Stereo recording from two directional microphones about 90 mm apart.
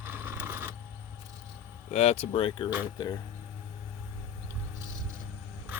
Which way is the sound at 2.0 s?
90° left.